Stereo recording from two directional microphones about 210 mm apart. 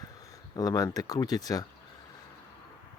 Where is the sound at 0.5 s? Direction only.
20° left (ahead or behind).